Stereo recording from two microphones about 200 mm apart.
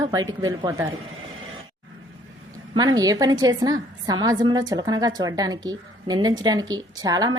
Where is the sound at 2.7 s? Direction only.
20° right (ahead or behind).